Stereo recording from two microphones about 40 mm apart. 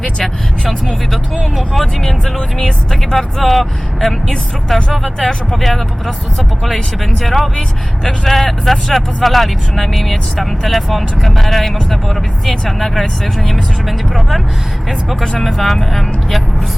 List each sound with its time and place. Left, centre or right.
0.2 s speech: centre
1.1 s speech: centre
2.9 s speech: centre